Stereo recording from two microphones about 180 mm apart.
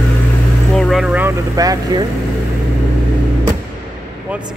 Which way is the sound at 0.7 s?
Centre (ahead or behind).